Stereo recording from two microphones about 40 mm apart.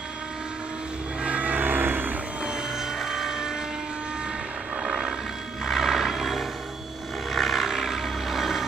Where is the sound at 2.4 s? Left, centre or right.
Centre.